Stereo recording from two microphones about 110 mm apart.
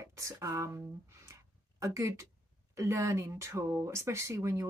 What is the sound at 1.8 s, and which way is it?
Speech, 30° right (ahead or behind).